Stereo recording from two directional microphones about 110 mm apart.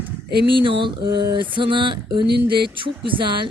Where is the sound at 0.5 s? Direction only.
50° right (ahead or behind).